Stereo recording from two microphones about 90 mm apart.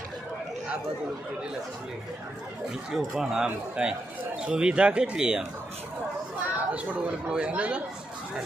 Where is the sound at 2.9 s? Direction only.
5° right (ahead or behind).